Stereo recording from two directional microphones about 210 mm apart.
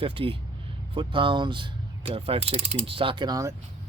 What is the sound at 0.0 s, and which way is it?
Mechanisms, 25° right (ahead or behind).